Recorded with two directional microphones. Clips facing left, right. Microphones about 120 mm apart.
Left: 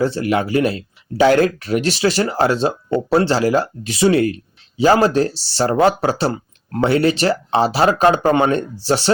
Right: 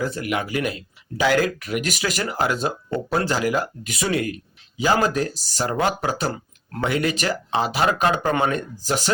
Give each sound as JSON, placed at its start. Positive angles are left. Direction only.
{"t": 0.0, "sound": "speech", "side_deg": 30}